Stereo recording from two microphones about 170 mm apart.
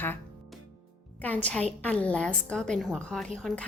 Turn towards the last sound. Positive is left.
turn(degrees=0)  # may be behind; listen again after turning